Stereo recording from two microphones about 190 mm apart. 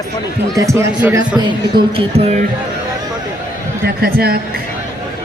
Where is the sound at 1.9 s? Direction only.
35° right (ahead or behind).